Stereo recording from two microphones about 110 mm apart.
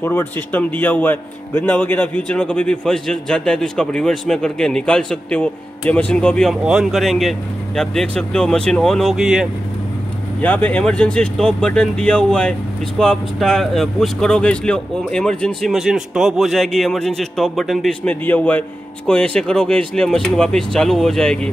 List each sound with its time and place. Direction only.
0.0 s speech: 20° left (ahead or behind)
6.6 s speech: 5° right (ahead or behind)
9.1 s speech: 5° right (ahead or behind)
10.4 s speech: 15° left (ahead or behind)
18.0 s speech: 15° left (ahead or behind)